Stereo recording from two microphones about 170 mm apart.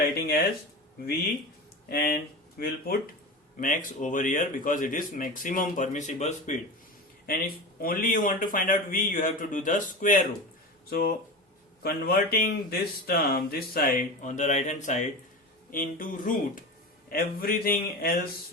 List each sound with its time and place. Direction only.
0.0 s speech: 70° left (ahead or behind)
1.9 s speech: 60° left (ahead or behind)
3.6 s speech: 55° left (ahead or behind)
7.3 s speech: 60° left (ahead or behind)
10.8 s speech: 65° left (ahead or behind)